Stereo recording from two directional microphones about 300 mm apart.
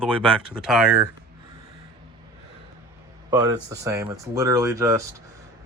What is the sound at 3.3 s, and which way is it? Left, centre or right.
Speech, centre.